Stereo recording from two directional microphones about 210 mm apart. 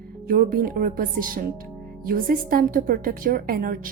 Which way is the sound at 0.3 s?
40° right (ahead or behind).